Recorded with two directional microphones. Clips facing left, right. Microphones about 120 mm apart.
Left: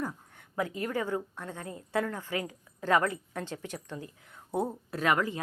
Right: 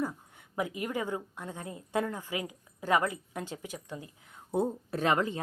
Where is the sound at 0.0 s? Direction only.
15° right (ahead or behind).